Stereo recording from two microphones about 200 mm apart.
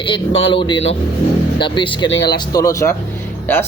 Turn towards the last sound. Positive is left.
turn(degrees=10)  # may be behind; listen again after turning